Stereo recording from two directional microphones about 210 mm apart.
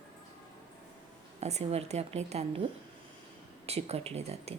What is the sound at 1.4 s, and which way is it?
A woman's voice, 30° right (ahead or behind).